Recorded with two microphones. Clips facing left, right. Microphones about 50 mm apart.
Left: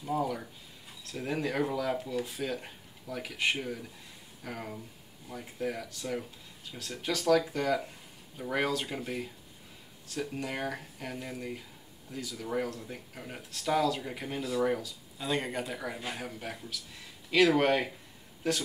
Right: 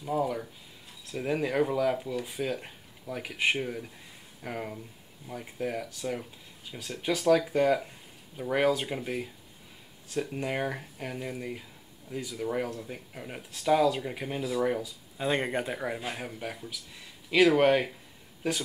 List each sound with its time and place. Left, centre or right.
0.0 s speech: centre
15.1 s speech: right
16.0 s speech: centre